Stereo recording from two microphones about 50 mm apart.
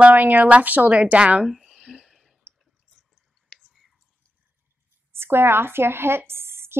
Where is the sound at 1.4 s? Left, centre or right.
Centre.